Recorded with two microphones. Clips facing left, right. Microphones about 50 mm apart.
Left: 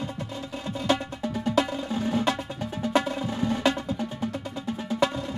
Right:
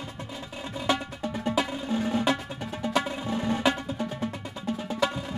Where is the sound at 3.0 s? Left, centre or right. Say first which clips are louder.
Left 2 dB; centre.